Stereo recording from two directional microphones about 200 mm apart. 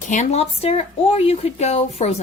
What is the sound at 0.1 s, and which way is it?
Speech, 35° left (ahead or behind).